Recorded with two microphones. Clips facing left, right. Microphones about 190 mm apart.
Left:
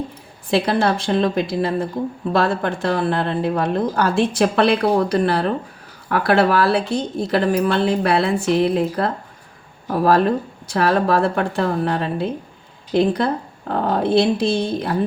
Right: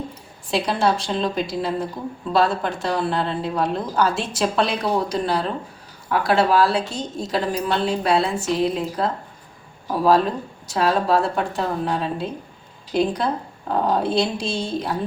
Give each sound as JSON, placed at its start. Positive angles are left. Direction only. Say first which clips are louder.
{"t": 0.5, "sound": "a woman's voice", "louder": "left 3 dB", "side_deg": 60}